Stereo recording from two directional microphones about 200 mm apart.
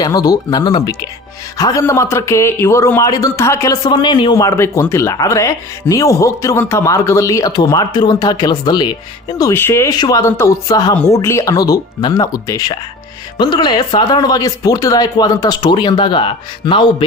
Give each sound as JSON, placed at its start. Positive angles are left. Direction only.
{"t": 0.0, "sound": "a man's voice", "side_deg": 20}